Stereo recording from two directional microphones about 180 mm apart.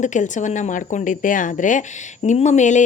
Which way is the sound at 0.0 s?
40° left (ahead or behind).